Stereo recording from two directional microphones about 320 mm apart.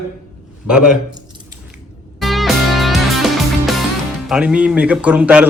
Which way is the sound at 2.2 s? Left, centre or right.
Centre.